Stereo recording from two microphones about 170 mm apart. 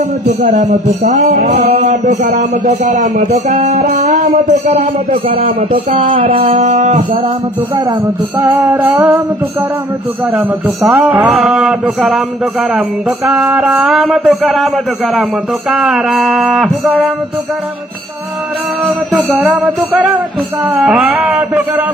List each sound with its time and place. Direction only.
0.4 s a man's voice: 45° right (ahead or behind)
4.0 s music: 40° right (ahead or behind)
6.2 s a man's voice: 50° right (ahead or behind)
8.5 s music: 15° right (ahead or behind)
10.9 s music: 5° right (ahead or behind)
15.7 s music: centre (ahead or behind)
19.1 s music: 10° right (ahead or behind)